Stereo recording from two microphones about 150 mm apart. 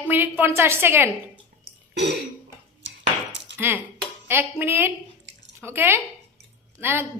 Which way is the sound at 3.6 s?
15° right (ahead or behind).